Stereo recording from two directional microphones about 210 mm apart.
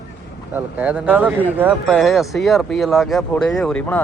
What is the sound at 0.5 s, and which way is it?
Speech, 10° right (ahead or behind).